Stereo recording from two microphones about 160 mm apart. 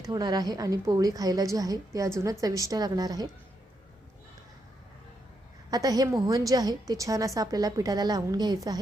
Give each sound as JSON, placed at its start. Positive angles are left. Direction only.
{"t": 0.0, "sound": "a woman's voice", "side_deg": -25}
{"t": 5.7, "sound": "a woman's voice", "side_deg": -25}